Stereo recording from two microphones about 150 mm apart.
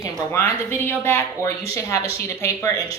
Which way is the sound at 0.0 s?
20° left (ahead or behind).